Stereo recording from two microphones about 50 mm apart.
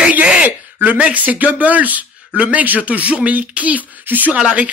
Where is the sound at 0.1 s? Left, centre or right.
Right.